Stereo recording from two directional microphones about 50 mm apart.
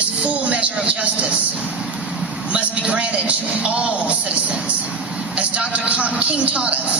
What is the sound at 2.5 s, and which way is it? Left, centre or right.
Vehicle, right.